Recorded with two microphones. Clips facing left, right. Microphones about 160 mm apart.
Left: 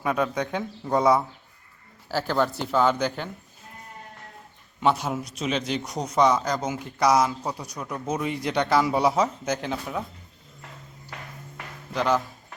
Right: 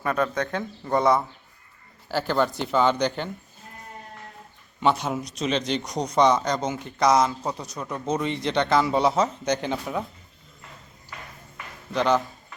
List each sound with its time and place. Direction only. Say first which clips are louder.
0.0 s speech: even; 5° left (ahead or behind)
4.8 s speech: even; 5° left (ahead or behind)
11.1 s a sound: left 1 dB; 75° left (ahead or behind)
11.9 s speech: right 2 dB; 5° left (ahead or behind)